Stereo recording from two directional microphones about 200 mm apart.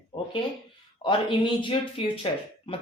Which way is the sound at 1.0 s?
25° left (ahead or behind).